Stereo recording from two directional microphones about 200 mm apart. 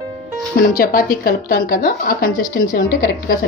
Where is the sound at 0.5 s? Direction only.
45° left (ahead or behind).